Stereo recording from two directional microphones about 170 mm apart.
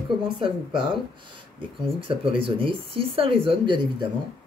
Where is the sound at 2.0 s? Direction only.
30° right (ahead or behind).